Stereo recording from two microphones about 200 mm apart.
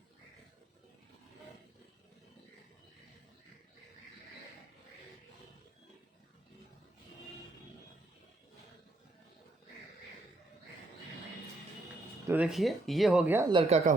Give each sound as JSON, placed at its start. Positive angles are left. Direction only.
{"t": 12.3, "sound": "speech", "side_deg": -5}
{"t": 13.5, "sound": "speech", "side_deg": -30}